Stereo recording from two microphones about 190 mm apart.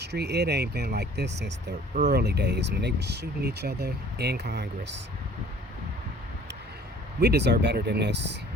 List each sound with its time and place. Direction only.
0.0 s speech: 60° right (ahead or behind)
7.2 s speech: 60° right (ahead or behind)